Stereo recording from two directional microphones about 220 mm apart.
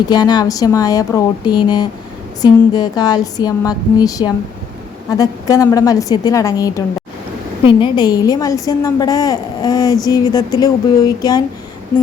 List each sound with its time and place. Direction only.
0.1 s a woman's voice: 20° left (ahead or behind)